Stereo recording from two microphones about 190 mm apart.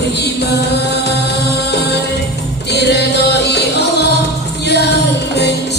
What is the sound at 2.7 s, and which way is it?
Music, 60° left (ahead or behind).